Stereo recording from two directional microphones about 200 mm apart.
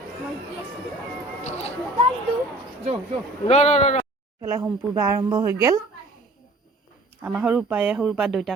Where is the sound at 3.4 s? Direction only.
35° left (ahead or behind).